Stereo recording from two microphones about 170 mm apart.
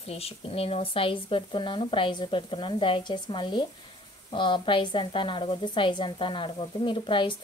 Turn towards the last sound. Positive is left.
turn(degrees=30)  # may be behind; listen again after turning